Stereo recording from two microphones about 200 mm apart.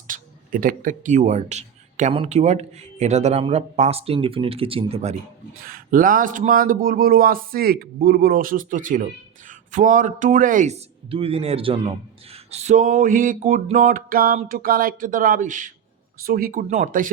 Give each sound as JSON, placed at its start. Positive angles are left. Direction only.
{"t": 0.1, "sound": "speech", "side_deg": -45}
{"t": 5.6, "sound": "a man's voice", "side_deg": -45}